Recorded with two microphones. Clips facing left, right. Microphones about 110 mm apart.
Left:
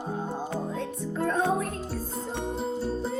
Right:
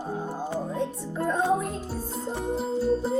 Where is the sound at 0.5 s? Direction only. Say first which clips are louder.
Right 2 dB; 15° right (ahead or behind).